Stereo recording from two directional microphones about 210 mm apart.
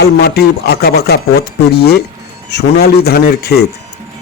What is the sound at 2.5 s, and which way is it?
A man's voice, 50° left (ahead or behind).